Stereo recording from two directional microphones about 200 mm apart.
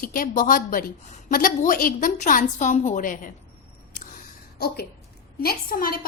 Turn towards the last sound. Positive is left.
turn(degrees=45)  # may be behind; listen again after turning